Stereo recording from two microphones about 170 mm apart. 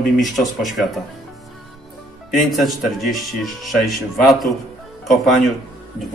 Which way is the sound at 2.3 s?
Centre (ahead or behind).